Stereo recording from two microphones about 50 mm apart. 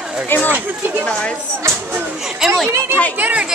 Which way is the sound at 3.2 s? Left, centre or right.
Right.